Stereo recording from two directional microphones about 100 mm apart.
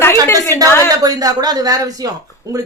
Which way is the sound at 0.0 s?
25° left (ahead or behind).